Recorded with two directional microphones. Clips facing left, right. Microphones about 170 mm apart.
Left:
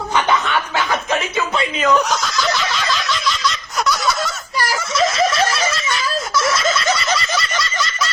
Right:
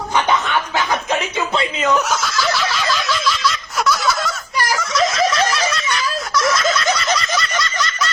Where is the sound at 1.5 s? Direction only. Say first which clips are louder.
Even; 25° right (ahead or behind).